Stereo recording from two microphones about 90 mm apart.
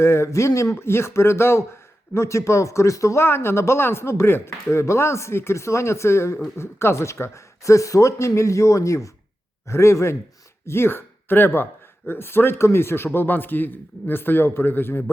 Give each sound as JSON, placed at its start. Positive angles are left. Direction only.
{"t": 0.0, "sound": "speech", "side_deg": 30}